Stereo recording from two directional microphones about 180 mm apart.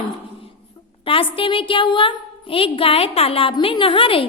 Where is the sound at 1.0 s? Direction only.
30° left (ahead or behind).